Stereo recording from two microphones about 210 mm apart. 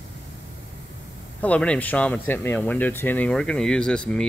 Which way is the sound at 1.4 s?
5° left (ahead or behind).